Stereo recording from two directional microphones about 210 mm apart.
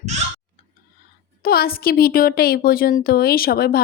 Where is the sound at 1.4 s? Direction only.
45° left (ahead or behind).